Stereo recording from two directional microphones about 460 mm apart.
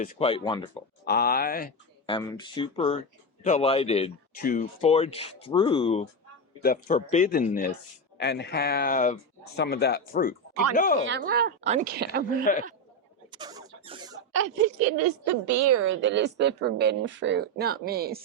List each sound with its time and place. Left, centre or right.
0.0 s speech: centre
11.0 s a woman's voice: right
12.5 s speech: centre
13.3 s a sound: centre
14.3 s a woman's voice: right